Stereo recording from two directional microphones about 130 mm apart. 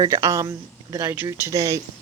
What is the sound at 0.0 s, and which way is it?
Speech, 25° right (ahead or behind).